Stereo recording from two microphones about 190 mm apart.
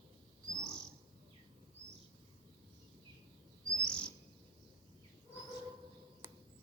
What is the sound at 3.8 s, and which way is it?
Chirp, 5° left (ahead or behind).